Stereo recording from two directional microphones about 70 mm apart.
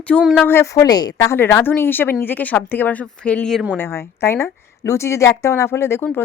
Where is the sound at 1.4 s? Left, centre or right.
Left.